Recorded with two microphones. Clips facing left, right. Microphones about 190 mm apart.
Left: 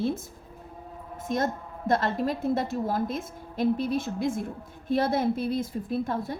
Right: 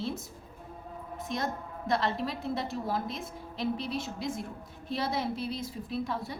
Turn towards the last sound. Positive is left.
turn(degrees=50)  # may be behind; listen again after turning